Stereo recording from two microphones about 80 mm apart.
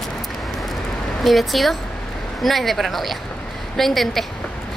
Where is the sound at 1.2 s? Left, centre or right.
Centre.